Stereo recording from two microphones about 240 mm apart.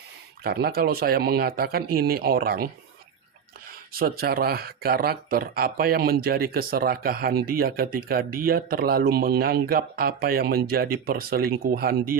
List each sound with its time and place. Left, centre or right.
0.4 s speech: right
3.9 s speech: right